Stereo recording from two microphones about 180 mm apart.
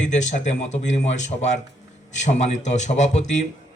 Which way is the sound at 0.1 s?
40° left (ahead or behind).